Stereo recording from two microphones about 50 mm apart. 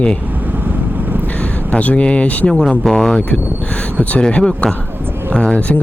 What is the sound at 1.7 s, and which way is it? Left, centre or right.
Speech, left.